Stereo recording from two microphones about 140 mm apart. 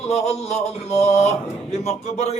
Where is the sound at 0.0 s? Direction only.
50° left (ahead or behind).